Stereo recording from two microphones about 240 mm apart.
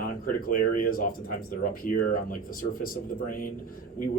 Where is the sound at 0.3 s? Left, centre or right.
Left.